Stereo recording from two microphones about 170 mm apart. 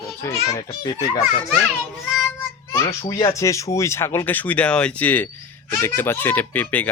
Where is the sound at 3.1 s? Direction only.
20° left (ahead or behind).